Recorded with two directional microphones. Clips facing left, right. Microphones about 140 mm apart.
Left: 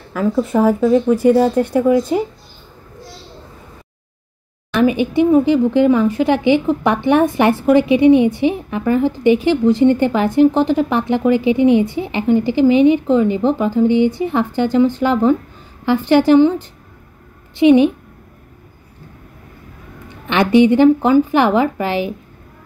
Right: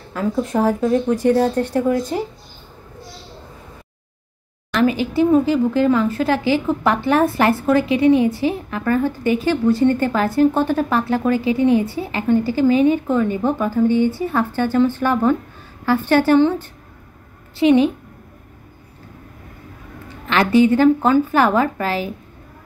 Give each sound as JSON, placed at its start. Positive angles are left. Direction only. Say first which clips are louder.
{"t": 0.1, "sound": "a woman's voice", "louder": "left 4 dB", "side_deg": 5}
{"t": 4.7, "sound": "a woman's voice", "louder": "left 3 dB", "side_deg": 20}
{"t": 20.2, "sound": "speech", "louder": "left 3 dB", "side_deg": 20}